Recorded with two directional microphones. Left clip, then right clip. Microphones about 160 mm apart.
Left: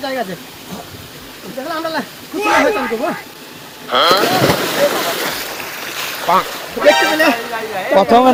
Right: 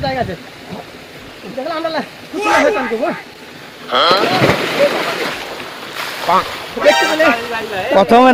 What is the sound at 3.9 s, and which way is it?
Speech, centre (ahead or behind).